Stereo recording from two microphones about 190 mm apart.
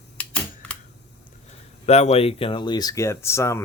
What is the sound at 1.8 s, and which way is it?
Speech, 35° left (ahead or behind).